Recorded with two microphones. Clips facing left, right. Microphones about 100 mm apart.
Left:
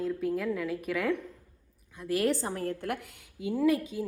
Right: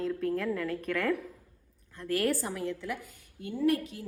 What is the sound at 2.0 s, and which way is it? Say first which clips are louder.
Speech: left 1 dB; 20° left (ahead or behind).